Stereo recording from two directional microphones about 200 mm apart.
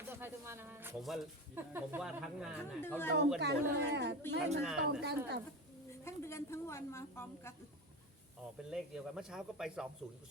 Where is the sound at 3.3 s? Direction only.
55° right (ahead or behind).